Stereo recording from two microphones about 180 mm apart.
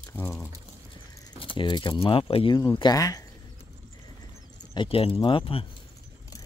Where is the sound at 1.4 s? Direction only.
30° left (ahead or behind).